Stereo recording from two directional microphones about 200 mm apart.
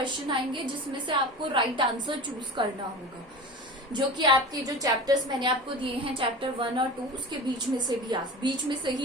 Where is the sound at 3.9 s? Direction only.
20° right (ahead or behind).